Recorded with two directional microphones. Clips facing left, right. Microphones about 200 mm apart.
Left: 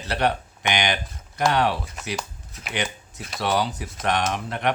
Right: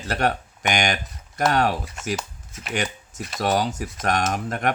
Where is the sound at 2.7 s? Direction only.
45° right (ahead or behind).